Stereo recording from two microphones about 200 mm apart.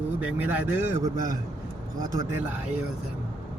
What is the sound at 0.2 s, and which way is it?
Speech, 10° right (ahead or behind).